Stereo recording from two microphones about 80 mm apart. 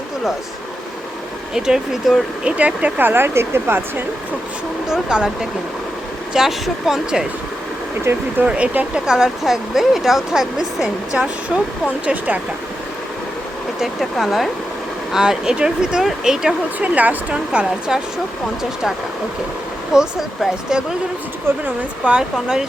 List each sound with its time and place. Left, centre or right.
1.5 s speech: centre; by 4.0 s right
4.9 s speech: centre
8.1 s speech: right
8.4 s speech: centre
12.0 s speech: centre
13.7 s speech: centre
19.9 s speech: centre
22.0 s speech: centre